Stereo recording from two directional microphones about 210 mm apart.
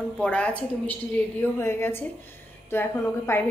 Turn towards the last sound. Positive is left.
turn(degrees=10)  # may be behind; listen again after turning